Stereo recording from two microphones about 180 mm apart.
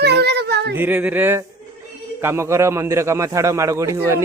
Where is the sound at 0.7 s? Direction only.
10° right (ahead or behind).